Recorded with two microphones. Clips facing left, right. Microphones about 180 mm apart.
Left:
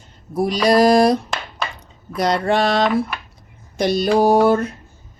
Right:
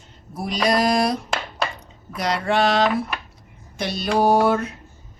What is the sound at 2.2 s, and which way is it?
Speech, 40° left (ahead or behind).